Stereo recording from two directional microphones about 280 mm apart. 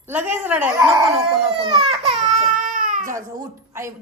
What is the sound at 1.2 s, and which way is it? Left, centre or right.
Baby cry, centre.